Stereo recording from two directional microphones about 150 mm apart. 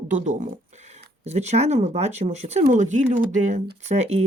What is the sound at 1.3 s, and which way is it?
Speech, 45° right (ahead or behind).